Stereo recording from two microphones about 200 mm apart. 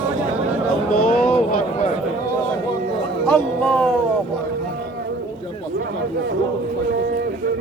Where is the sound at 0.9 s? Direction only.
45° left (ahead or behind).